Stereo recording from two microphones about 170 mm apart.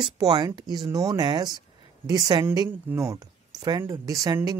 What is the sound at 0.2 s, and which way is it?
A woman's voice, 25° right (ahead or behind).